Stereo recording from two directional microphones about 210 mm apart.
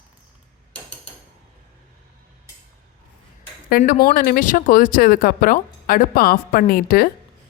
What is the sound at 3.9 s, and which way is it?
Speech, 45° left (ahead or behind).